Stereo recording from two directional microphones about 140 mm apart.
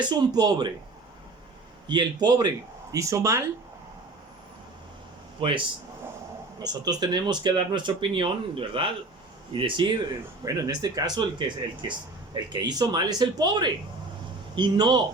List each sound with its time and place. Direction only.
0.3 s speech: 30° right (ahead or behind)
1.9 s speech: 30° right (ahead or behind)
5.4 s speech: 40° right (ahead or behind)
6.6 s speech: 30° right (ahead or behind)
10.4 s speech: 25° right (ahead or behind)